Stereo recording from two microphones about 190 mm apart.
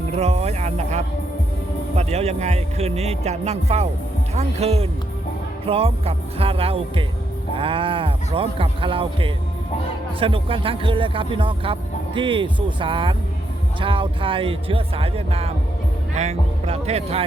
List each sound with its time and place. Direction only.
0.1 s speech: 35° right (ahead or behind)